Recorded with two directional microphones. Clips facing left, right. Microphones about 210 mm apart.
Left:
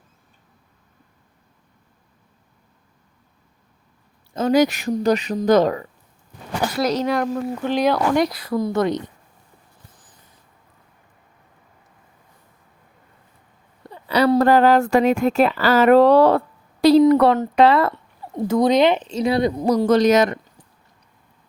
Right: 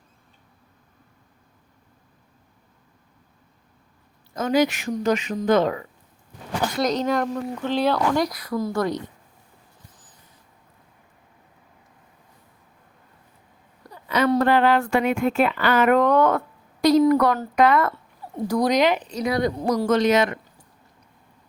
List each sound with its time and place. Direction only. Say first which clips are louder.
4.4 s speech: left 4 dB; 35° left (ahead or behind)
6.6 s speech: left 2 dB; 5° left (ahead or behind)
8.2 s speech: left 4 dB; 30° left (ahead or behind)
13.8 s speech: left 4 dB; 30° left (ahead or behind)